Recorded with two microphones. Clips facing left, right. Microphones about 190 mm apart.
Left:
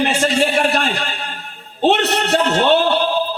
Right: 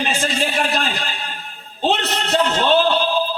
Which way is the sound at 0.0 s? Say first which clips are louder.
Left 5 dB; 70° left (ahead or behind).